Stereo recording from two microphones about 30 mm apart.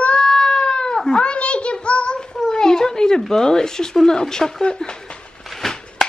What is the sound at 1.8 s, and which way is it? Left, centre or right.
Child singing, left.